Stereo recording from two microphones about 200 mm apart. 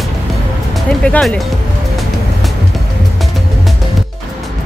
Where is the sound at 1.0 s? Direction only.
5° left (ahead or behind).